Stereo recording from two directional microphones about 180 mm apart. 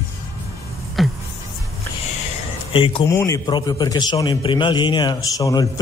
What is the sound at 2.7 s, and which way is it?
Speech, 30° left (ahead or behind).